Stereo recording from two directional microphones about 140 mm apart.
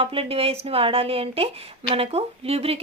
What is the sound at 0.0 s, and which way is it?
A woman's voice, 40° right (ahead or behind).